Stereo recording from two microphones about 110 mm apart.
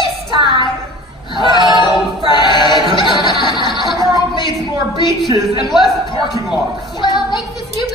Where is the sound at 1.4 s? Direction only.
45° left (ahead or behind).